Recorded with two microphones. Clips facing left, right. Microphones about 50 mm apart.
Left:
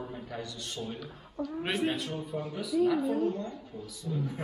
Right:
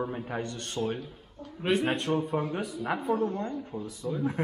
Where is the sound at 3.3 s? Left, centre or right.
Right.